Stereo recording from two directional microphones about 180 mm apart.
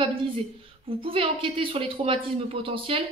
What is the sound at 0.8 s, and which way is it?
Speech, 30° right (ahead or behind).